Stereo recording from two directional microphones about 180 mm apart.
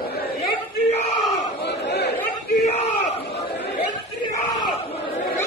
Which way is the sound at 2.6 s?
40° left (ahead or behind).